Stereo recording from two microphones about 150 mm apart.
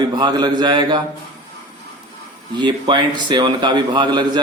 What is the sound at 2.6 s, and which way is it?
Speech, 30° right (ahead or behind).